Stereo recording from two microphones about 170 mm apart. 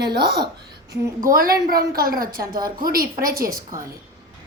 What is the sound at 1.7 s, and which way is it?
A woman's voice, 60° right (ahead or behind).